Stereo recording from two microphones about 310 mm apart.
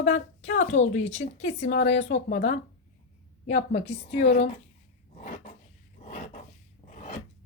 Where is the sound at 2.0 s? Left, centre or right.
Left.